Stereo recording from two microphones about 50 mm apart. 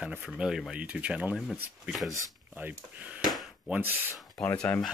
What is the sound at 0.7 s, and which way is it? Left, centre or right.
Speech, right.